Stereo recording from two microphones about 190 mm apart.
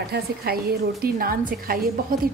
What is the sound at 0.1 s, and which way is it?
A woman's voice, 55° right (ahead or behind).